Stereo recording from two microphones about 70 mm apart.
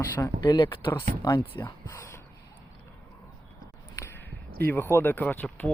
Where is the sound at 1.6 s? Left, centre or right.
Left.